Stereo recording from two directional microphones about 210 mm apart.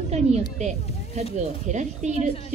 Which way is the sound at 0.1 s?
30° right (ahead or behind).